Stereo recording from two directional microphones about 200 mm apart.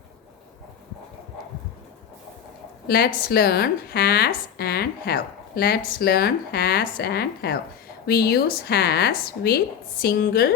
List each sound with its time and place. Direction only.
2.8 s speech: 50° left (ahead or behind)